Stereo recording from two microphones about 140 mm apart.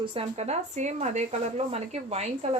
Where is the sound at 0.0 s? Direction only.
40° right (ahead or behind).